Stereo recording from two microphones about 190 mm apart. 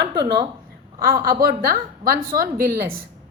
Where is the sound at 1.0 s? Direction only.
50° right (ahead or behind).